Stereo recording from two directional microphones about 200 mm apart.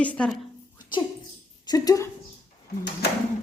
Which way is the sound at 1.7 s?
20° left (ahead or behind).